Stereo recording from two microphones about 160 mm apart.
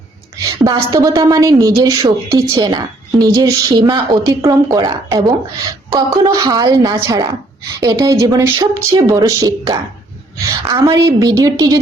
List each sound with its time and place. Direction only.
0.4 s a woman's voice: 20° right (ahead or behind)